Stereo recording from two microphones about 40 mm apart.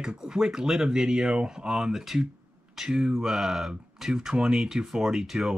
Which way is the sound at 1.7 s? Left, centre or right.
Centre.